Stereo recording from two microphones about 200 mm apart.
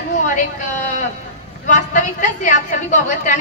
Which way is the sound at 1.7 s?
40° left (ahead or behind).